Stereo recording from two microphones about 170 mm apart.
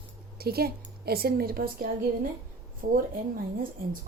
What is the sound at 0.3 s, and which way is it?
A woman's voice, 65° right (ahead or behind).